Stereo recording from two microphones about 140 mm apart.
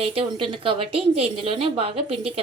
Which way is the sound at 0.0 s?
45° right (ahead or behind).